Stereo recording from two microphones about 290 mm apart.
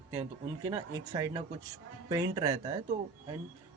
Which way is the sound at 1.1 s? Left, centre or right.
Centre.